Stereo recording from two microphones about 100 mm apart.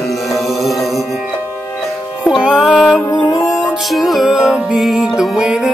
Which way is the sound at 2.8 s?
5° left (ahead or behind).